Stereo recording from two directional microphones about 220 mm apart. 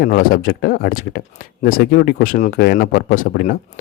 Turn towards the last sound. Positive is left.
turn(degrees=40)  # may be behind; listen again after turning